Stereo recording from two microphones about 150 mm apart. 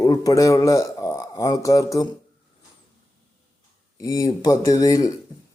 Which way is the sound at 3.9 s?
25° left (ahead or behind).